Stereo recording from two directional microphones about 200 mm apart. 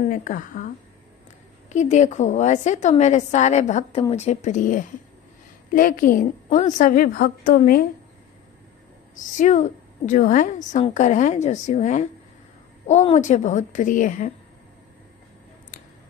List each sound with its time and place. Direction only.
0.0 s a woman's voice: 40° left (ahead or behind)
1.7 s a woman's voice: 35° left (ahead or behind)
9.1 s a woman's voice: 40° left (ahead or behind)